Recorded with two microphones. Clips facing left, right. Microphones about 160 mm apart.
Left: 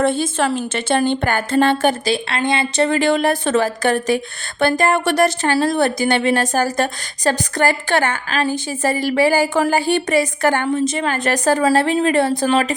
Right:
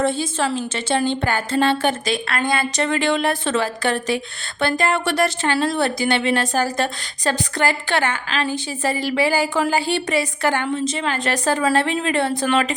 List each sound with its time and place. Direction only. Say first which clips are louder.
0.0 s a woman's voice: left 3 dB; 55° left (ahead or behind); by 12.7 s 35° left (ahead or behind)